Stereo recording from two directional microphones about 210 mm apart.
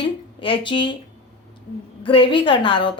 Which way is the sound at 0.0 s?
25° left (ahead or behind).